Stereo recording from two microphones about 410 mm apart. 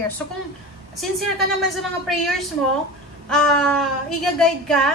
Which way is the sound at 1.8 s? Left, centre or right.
Centre.